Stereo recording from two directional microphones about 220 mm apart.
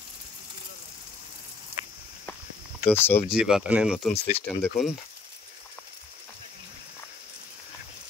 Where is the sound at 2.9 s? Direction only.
10° left (ahead or behind).